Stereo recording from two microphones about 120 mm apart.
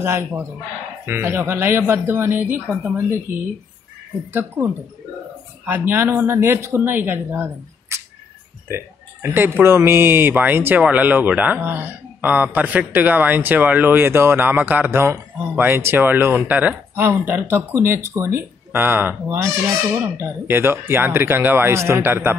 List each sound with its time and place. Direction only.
0.0 s a woman's voice: 20° right (ahead or behind)
5.7 s speech: 15° right (ahead or behind)
7.9 s a sound: 25° right (ahead or behind)
8.6 s speech: 20° right (ahead or behind)